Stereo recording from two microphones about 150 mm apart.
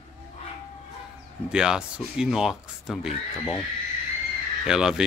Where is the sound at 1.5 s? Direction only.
5° right (ahead or behind).